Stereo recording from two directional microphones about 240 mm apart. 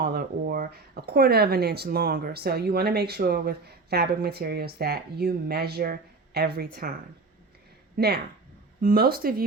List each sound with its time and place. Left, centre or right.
0.0 s speech: right
7.9 s speech: right